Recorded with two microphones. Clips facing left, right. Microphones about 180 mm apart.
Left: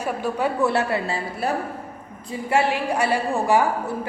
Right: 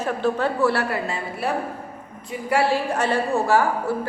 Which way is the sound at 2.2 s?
20° left (ahead or behind).